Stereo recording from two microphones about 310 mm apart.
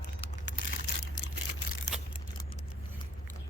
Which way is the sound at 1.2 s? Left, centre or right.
Left.